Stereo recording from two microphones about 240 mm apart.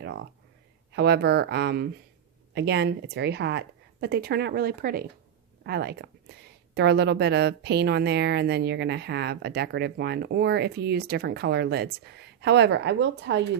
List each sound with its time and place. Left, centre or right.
0.0 s a woman's voice: right